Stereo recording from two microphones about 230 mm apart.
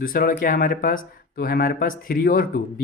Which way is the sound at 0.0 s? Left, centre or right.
Left.